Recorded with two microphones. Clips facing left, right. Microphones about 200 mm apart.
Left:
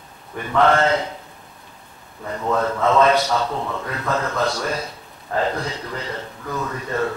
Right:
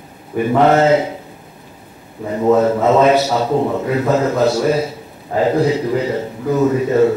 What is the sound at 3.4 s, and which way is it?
Speech, 35° right (ahead or behind).